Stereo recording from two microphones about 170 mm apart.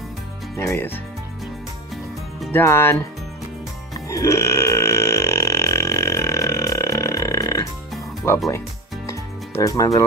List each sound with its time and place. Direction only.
0.6 s speech: 15° left (ahead or behind)
2.5 s speech: 15° left (ahead or behind)
4.1 s burping: 20° left (ahead or behind)
8.5 s music: 15° left (ahead or behind)